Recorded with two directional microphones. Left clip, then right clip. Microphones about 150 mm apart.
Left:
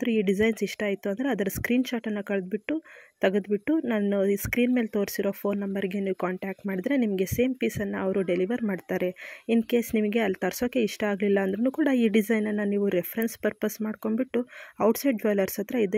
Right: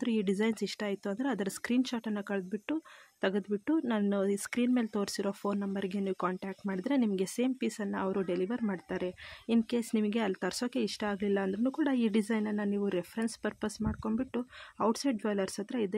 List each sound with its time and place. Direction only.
0.0 s speech: 15° left (ahead or behind)